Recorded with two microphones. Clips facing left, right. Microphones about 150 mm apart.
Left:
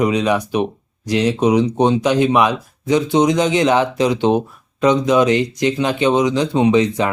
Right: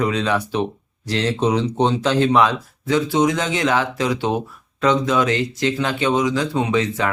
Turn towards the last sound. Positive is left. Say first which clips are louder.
# left 6 dB
turn(degrees=20)  # may be behind; listen again after turning